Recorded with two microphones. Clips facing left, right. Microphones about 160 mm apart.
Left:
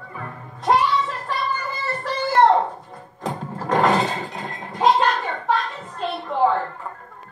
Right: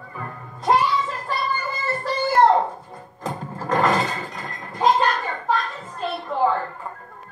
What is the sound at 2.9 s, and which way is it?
Music, centre (ahead or behind).